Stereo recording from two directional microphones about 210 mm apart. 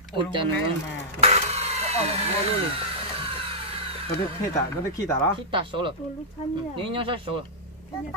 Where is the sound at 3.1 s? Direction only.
25° right (ahead or behind).